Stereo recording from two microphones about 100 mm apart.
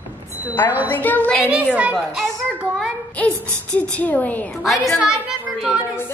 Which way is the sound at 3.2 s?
15° left (ahead or behind).